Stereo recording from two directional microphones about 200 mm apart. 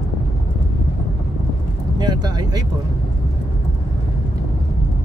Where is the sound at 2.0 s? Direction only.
20° right (ahead or behind).